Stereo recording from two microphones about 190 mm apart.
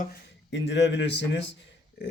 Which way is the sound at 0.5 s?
65° left (ahead or behind).